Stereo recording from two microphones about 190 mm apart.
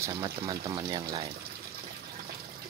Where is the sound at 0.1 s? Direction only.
25° right (ahead or behind).